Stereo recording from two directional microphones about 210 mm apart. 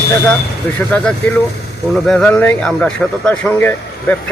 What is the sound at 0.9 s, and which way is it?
Speech, 5° left (ahead or behind).